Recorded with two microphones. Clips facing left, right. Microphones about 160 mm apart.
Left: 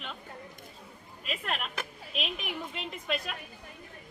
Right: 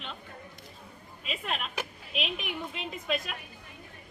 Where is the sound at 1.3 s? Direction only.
Centre (ahead or behind).